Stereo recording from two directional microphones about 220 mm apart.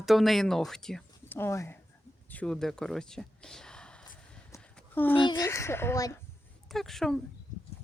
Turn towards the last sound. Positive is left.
turn(degrees=0)  # may be behind; listen again after turning